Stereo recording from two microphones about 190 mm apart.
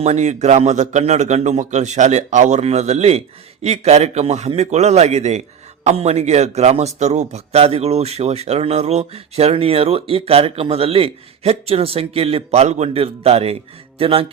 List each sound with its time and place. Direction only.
0.0 s speech: 35° right (ahead or behind)
14.0 s mantra: 30° right (ahead or behind)